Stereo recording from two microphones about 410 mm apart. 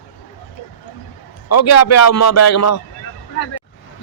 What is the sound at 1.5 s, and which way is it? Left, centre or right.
A man's voice, left.